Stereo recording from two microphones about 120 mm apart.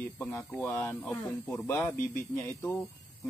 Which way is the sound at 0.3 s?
15° left (ahead or behind).